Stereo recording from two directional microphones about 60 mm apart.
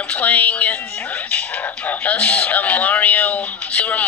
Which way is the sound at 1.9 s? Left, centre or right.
Left.